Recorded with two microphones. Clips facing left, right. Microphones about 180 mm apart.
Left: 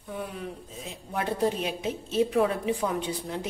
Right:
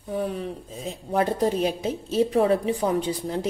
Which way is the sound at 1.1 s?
40° right (ahead or behind).